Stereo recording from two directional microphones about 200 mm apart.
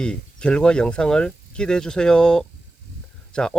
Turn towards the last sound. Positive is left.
turn(degrees=5)  # may be behind; listen again after turning